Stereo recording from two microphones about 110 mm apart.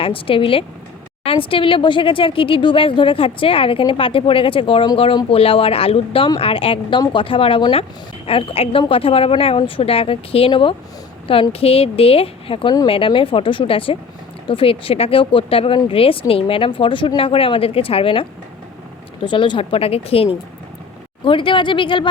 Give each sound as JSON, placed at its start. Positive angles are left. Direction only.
{"t": 0.0, "sound": "speech", "side_deg": 55}
{"t": 21.2, "sound": "speech", "side_deg": 50}